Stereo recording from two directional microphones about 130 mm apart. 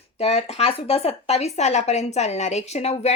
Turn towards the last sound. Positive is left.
turn(degrees=55)  # may be behind; listen again after turning